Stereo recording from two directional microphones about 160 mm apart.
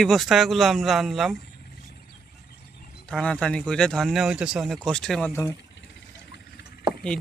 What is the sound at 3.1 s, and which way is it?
Speech, 5° left (ahead or behind).